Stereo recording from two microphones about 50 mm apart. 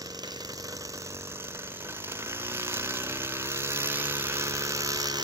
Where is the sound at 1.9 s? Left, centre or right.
Right.